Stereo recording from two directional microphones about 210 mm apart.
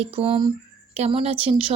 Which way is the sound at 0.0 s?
25° right (ahead or behind).